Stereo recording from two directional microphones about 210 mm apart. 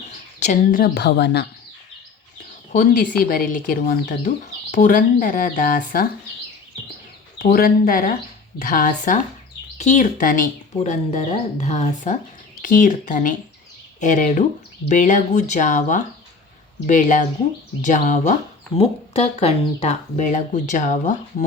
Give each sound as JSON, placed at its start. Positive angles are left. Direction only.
{"t": 0.0, "sound": "speech", "side_deg": 35}
{"t": 2.7, "sound": "speech", "side_deg": 45}
{"t": 7.3, "sound": "speech", "side_deg": 45}